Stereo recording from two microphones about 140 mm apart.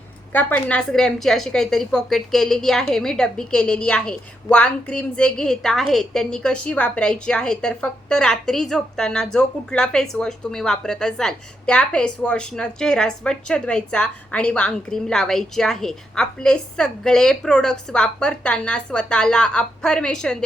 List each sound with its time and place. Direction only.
0.3 s a woman's voice: 10° left (ahead or behind)